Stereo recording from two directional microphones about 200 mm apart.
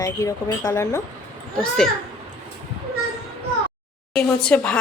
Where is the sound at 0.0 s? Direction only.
15° left (ahead or behind).